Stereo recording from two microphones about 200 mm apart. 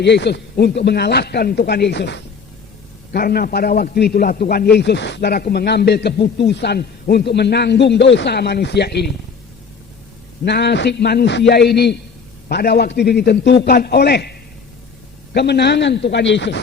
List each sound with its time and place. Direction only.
0.0 s a man's voice: 60° left (ahead or behind)
10.4 s a man's voice: 55° left (ahead or behind)